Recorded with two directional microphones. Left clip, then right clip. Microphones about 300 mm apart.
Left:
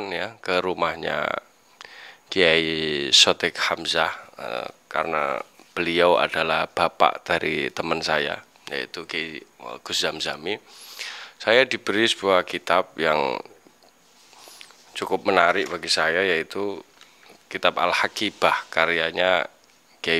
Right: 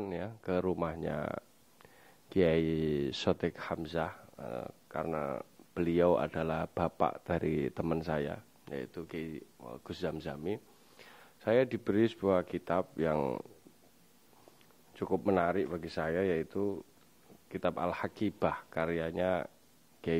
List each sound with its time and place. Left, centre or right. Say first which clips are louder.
0.0 s speech: left 11 dB; centre
14.9 s speech: left 9 dB; centre